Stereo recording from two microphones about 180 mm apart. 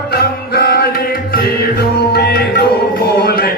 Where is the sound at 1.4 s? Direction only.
60° left (ahead or behind).